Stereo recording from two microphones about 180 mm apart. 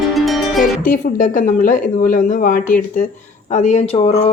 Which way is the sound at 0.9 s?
45° left (ahead or behind).